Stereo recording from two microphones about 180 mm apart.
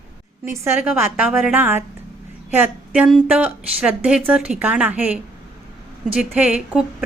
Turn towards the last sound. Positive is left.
turn(degrees=-5)  # may be behind; listen again after turning